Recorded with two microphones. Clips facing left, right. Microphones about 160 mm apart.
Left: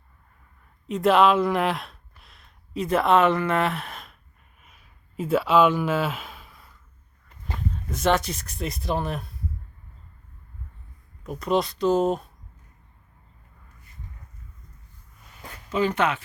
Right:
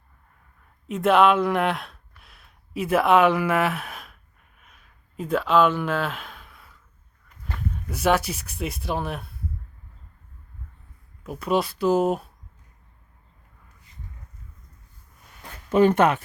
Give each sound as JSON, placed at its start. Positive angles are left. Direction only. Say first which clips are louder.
{"t": 0.9, "sound": "speech", "louder": "even", "side_deg": 0}
{"t": 4.6, "sound": "a sound", "louder": "even", "side_deg": 5}
{"t": 7.9, "sound": "speech", "louder": "right 1 dB", "side_deg": -10}
{"t": 11.2, "sound": "speech", "louder": "even", "side_deg": -5}
{"t": 15.7, "sound": "speech", "louder": "right 6 dB", "side_deg": -55}